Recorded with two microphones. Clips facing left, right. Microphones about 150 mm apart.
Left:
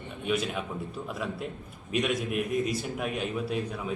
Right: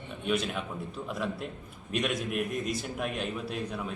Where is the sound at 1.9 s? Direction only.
Centre (ahead or behind).